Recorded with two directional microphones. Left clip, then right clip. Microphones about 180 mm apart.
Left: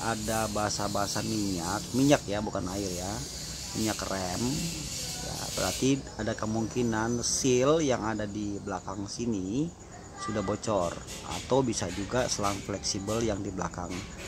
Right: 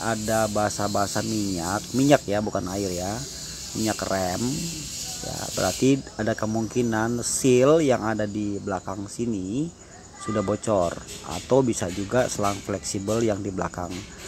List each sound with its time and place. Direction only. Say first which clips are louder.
0.0 s speech: right 6 dB; 20° right (ahead or behind)
5.6 s speech: right 7 dB; 25° right (ahead or behind)
10.3 s speech: right 6 dB; 20° right (ahead or behind)